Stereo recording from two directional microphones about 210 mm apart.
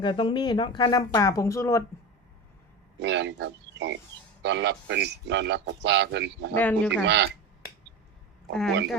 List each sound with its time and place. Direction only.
0.0 s speech: 25° left (ahead or behind)
3.0 s a man's voice: 55° right (ahead or behind)
6.5 s speech: 10° left (ahead or behind)
7.0 s a man's voice: 55° right (ahead or behind)